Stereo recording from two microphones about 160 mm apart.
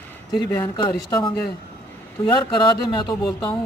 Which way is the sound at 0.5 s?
25° left (ahead or behind).